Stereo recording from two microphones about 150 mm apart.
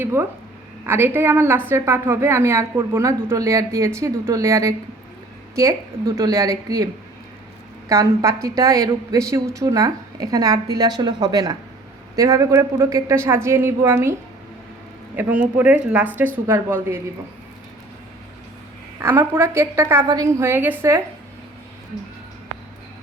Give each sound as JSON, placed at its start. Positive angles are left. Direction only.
{"t": 0.0, "sound": "a woman's voice", "side_deg": -15}
{"t": 6.1, "sound": "a woman's voice", "side_deg": -25}
{"t": 7.9, "sound": "a woman's voice", "side_deg": -20}
{"t": 19.3, "sound": "a woman's voice", "side_deg": -20}